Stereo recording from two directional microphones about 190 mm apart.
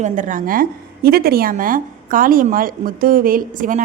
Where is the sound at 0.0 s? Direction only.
40° right (ahead or behind).